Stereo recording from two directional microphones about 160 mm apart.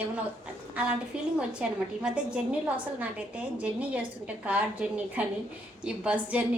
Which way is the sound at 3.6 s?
10° right (ahead or behind).